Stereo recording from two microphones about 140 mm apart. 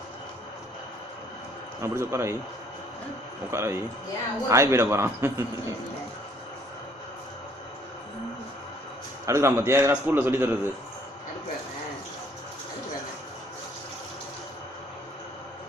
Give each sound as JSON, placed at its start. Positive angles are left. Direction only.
{"t": 1.8, "sound": "a man's voice", "side_deg": -20}
{"t": 3.5, "sound": "a man's voice", "side_deg": -20}
{"t": 9.2, "sound": "a man's voice", "side_deg": -20}